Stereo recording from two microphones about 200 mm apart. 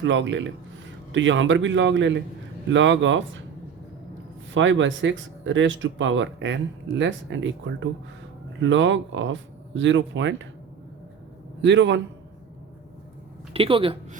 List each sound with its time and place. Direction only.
0.0 s speech: 65° right (ahead or behind)
4.5 s speech: 70° right (ahead or behind)
11.6 s a man's voice: 65° right (ahead or behind)
13.5 s speech: 25° right (ahead or behind)